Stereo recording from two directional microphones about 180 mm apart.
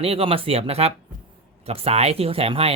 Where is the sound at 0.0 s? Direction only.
35° right (ahead or behind).